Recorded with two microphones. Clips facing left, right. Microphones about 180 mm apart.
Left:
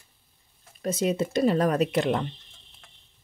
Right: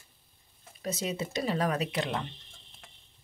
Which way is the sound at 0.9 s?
55° left (ahead or behind).